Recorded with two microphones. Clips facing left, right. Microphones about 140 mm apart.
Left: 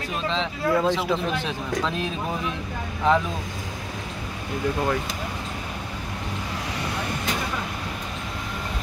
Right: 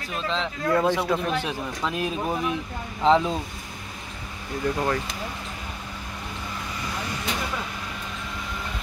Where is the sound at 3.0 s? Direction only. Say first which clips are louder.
Right 2 dB; 25° right (ahead or behind).